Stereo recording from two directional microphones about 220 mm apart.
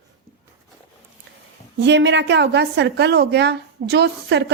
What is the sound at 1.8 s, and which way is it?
A woman's voice, 55° right (ahead or behind).